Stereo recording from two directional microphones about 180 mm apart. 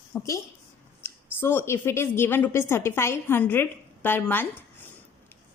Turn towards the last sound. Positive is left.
turn(degrees=10)  # may be behind; listen again after turning